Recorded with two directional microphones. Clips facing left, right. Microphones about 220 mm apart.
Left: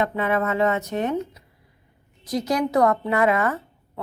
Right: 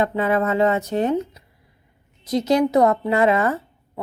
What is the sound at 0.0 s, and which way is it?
Speech, 30° right (ahead or behind).